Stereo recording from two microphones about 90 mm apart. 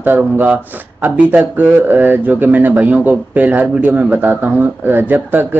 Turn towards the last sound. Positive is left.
turn(degrees=-20)  # may be behind; listen again after turning